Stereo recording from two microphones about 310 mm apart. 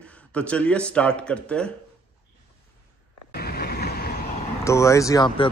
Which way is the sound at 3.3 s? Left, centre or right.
Left.